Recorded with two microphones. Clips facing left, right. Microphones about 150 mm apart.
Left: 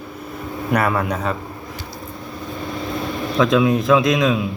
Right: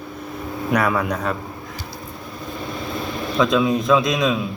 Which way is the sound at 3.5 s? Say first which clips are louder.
Left 2 dB; 10° left (ahead or behind).